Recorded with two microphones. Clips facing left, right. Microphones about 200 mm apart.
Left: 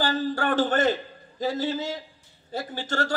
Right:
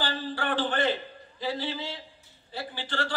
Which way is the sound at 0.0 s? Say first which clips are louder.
Left 6 dB; 45° left (ahead or behind).